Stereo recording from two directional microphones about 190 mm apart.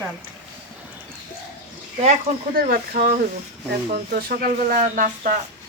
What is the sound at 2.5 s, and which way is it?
Speech, 50° right (ahead or behind).